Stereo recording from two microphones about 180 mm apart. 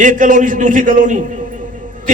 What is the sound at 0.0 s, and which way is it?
A man's voice, 45° right (ahead or behind).